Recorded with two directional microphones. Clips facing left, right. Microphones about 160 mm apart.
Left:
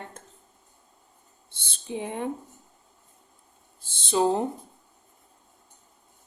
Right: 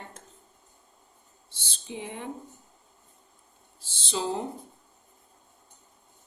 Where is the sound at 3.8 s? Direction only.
55° left (ahead or behind).